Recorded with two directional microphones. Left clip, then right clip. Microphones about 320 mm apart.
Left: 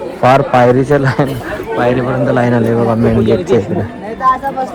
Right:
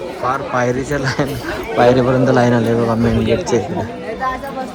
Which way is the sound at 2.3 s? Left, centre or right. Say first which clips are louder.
Left 2 dB; centre.